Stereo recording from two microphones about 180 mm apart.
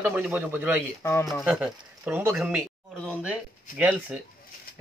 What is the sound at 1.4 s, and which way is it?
A man's voice, 10° right (ahead or behind).